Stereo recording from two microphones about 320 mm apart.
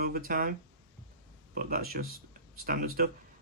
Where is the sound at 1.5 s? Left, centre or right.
Right.